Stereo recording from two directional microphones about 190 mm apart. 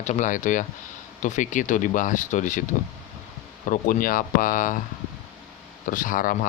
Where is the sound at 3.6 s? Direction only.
45° left (ahead or behind).